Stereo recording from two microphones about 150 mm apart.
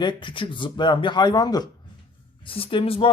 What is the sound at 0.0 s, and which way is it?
Speech, 30° left (ahead or behind).